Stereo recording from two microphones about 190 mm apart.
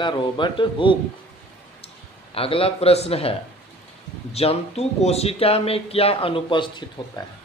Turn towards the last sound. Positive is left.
turn(degrees=25)  # may be behind; listen again after turning